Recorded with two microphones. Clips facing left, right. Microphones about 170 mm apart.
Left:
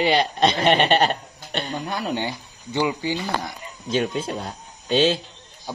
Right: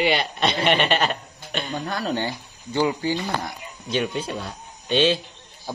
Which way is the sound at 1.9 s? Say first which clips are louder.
Right 1 dB; 15° left (ahead or behind).